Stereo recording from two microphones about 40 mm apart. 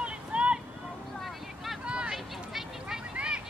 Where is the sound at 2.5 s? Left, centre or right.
Centre.